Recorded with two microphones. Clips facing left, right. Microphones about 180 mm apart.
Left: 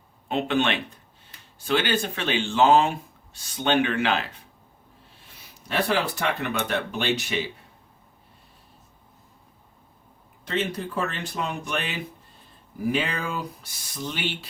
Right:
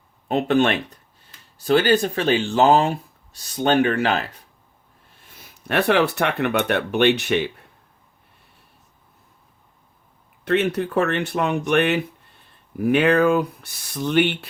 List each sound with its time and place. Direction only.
0.3 s speech: 40° right (ahead or behind)
5.4 s speech: 60° right (ahead or behind)
10.4 s speech: 65° right (ahead or behind)